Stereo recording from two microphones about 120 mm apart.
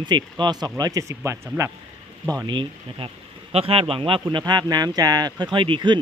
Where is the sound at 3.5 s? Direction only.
50° right (ahead or behind).